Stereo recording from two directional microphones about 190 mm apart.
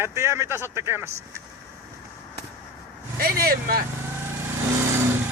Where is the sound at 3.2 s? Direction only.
50° right (ahead or behind).